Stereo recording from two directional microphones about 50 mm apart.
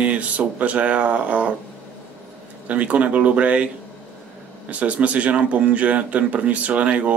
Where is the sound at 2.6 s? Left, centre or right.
Right.